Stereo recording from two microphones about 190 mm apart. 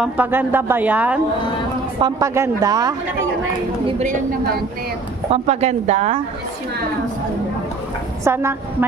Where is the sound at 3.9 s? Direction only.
35° right (ahead or behind).